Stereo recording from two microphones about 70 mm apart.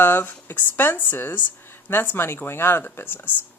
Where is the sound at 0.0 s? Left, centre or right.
Left.